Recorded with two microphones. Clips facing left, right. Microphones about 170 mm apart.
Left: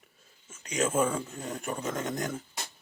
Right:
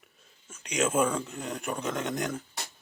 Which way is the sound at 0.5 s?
80° right.